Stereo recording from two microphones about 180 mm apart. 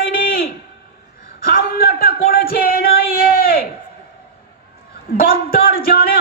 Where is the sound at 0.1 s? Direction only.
55° left (ahead or behind).